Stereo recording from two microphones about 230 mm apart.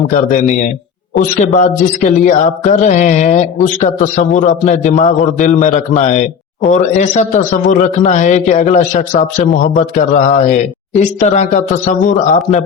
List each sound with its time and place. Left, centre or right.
0.1 s a man's voice: left
1.4 s mantra: left